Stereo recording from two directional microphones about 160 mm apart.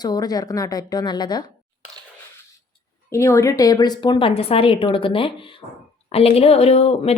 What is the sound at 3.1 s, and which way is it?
Speech, 20° left (ahead or behind).